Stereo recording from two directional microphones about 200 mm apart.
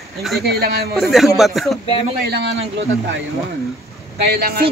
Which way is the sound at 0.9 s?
Centre (ahead or behind).